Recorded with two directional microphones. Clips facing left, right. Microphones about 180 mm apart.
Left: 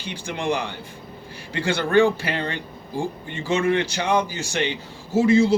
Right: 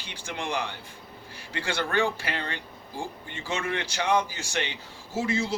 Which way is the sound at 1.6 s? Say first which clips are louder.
Left 9 dB; 20° left (ahead or behind).